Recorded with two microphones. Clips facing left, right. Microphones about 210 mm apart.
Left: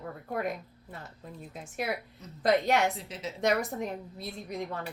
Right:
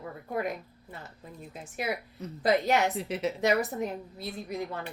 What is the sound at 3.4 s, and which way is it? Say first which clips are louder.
A woman's voice: left 1 dB; 5° right (ahead or behind).